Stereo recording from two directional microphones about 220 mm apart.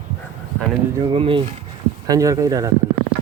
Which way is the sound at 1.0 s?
25° right (ahead or behind).